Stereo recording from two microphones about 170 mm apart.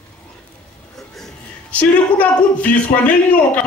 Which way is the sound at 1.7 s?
10° left (ahead or behind).